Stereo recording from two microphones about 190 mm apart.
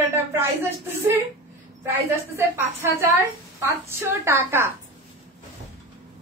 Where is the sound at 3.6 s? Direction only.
15° right (ahead or behind).